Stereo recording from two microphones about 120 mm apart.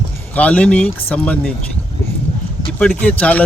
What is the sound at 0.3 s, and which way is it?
Speech, 10° left (ahead or behind).